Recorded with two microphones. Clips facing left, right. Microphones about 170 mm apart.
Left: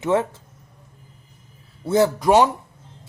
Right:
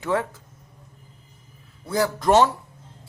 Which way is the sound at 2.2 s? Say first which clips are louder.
Left 2 dB; 10° left (ahead or behind).